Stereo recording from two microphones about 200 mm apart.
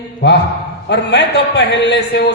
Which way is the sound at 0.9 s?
60° left (ahead or behind).